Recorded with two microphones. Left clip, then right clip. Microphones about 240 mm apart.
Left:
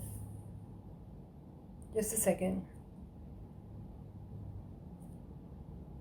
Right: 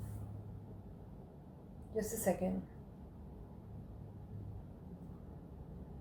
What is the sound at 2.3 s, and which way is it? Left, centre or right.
Speech, left.